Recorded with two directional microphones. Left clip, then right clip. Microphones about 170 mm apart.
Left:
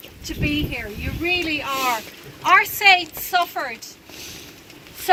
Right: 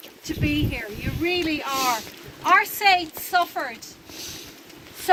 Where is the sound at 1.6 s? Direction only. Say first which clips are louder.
Even; 10° left (ahead or behind).